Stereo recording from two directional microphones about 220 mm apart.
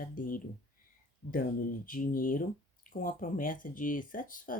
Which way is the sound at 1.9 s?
40° left (ahead or behind).